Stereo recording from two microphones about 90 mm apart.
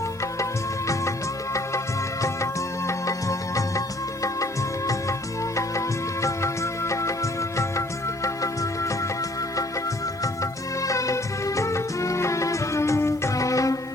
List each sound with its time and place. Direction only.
2.2 s music: 35° left (ahead or behind)
6.2 s music: 35° left (ahead or behind)
10.8 s music: 35° left (ahead or behind)